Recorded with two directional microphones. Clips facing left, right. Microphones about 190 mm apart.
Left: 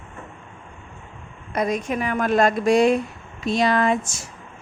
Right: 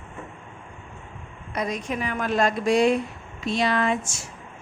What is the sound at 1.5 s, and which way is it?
Speech, 50° left (ahead or behind).